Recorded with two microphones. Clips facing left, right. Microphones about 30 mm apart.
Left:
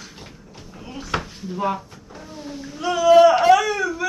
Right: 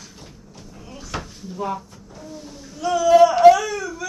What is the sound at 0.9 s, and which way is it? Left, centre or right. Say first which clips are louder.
Drawer open or close: left 5 dB; left.